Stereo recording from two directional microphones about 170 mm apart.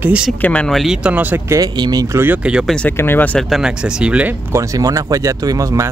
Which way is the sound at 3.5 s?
5° right (ahead or behind).